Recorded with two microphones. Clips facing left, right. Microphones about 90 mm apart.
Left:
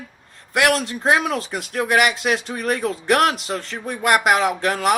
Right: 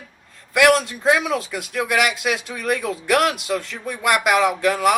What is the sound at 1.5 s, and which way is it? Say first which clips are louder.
Speech: left 2 dB; 45° left (ahead or behind).